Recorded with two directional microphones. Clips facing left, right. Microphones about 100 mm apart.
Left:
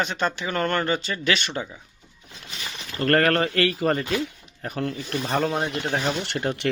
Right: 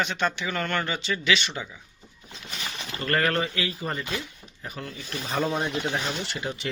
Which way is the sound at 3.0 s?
60° left (ahead or behind).